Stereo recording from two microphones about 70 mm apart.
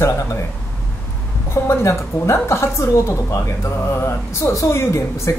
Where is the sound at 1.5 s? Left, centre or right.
Left.